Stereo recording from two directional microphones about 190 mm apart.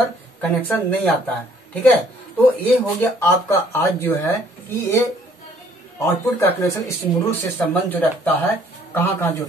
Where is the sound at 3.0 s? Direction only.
10° left (ahead or behind).